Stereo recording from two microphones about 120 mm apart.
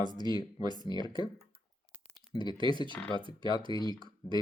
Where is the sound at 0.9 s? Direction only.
40° left (ahead or behind).